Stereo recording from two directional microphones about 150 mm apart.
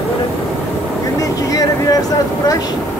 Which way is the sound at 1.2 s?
25° left (ahead or behind).